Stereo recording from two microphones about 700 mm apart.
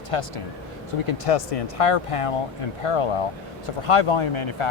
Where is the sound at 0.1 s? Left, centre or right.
Left.